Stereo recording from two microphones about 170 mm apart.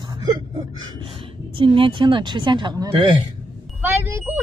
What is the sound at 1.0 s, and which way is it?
A woman's voice, 30° right (ahead or behind).